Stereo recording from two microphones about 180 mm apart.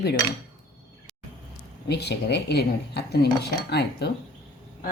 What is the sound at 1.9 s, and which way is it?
Speech, 65° left (ahead or behind).